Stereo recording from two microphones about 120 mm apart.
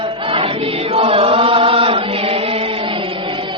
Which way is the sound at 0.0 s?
45° right (ahead or behind).